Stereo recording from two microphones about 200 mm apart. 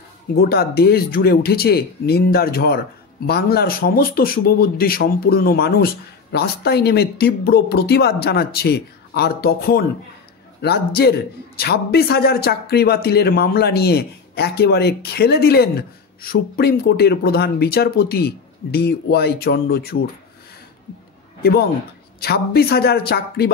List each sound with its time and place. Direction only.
0.4 s a man's voice: 50° left (ahead or behind)
21.4 s a man's voice: 50° left (ahead or behind)